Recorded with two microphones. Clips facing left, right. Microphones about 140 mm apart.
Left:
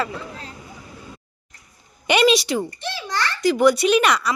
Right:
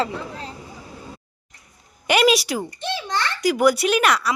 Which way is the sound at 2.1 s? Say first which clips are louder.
Left 1 dB; 5° right (ahead or behind).